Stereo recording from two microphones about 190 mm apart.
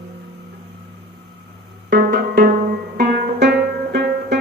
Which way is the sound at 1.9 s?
50° right (ahead or behind).